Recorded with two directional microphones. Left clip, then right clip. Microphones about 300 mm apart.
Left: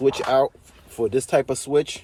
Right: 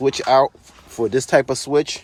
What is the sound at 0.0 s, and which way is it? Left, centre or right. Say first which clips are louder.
Speech: right 4 dB; centre.